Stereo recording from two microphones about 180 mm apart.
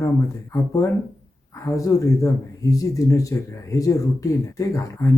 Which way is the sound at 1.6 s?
20° left (ahead or behind).